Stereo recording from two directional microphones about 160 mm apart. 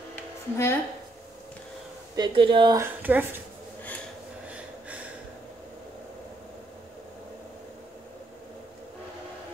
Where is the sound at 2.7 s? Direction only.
15° right (ahead or behind).